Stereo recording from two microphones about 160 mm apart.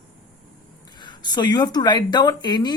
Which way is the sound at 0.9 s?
25° left (ahead or behind).